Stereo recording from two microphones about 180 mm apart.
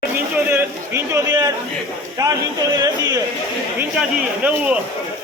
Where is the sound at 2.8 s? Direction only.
20° right (ahead or behind).